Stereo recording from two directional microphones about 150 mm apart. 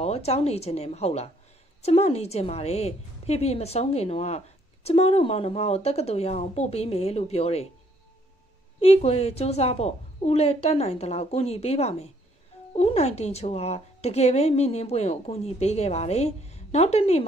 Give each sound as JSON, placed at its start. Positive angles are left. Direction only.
{"t": 0.0, "sound": "a woman's voice", "side_deg": 45}
{"t": 8.8, "sound": "a woman's voice", "side_deg": 45}